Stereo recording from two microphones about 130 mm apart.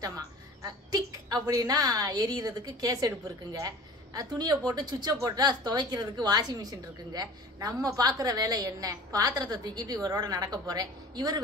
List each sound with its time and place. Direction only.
0.6 s a woman's voice: 30° right (ahead or behind)